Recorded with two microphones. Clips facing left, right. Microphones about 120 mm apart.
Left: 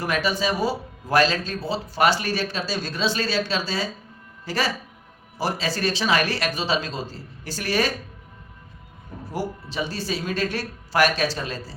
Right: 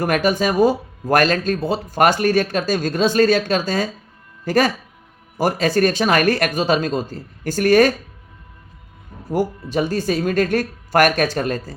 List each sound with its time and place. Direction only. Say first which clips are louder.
0.0 s speech: right 6 dB; 50° right (ahead or behind)
9.3 s speech: right 9 dB; 50° right (ahead or behind)